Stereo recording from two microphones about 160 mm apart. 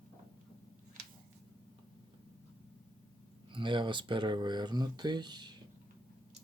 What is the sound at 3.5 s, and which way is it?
Speech, 30° right (ahead or behind).